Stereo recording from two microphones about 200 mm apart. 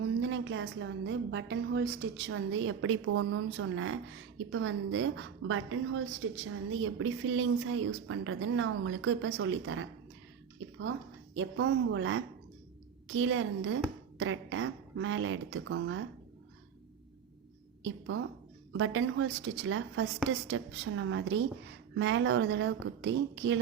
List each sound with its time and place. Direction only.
0.0 s a woman's voice: 65° right (ahead or behind); by 3.9 s 90° right
4.4 s a woman's voice: 75° right (ahead or behind)
11.3 s a woman's voice: 70° right (ahead or behind)
17.8 s a woman's voice: 70° right (ahead or behind)
18.7 s a woman's voice: 90° right; by 23.6 s 65° right (ahead or behind)